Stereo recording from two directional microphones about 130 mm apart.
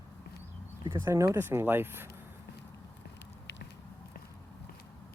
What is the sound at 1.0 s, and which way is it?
Speech, 25° right (ahead or behind).